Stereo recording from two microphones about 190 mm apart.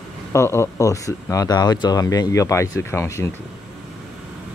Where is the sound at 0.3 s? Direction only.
15° left (ahead or behind).